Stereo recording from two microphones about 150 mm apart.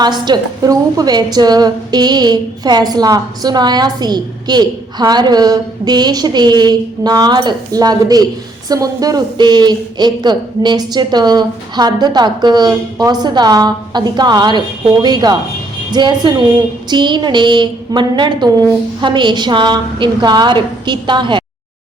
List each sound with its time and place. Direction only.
0.0 s a woman's voice: 30° right (ahead or behind)